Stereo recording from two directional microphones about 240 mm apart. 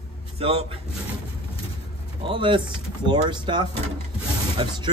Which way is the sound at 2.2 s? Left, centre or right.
Right.